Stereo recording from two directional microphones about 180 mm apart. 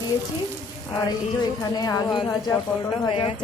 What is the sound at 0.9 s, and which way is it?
Speech, 25° left (ahead or behind).